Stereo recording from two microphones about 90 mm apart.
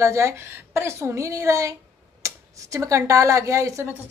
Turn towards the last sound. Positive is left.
turn(degrees=-35)  # may be behind; listen again after turning